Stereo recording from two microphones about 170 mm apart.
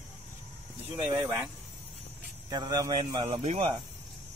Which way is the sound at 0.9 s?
30° right (ahead or behind).